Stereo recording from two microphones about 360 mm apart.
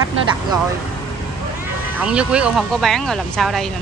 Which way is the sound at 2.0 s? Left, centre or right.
Centre.